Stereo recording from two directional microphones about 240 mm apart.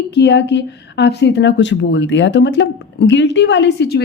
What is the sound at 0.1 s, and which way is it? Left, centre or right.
Speech, left.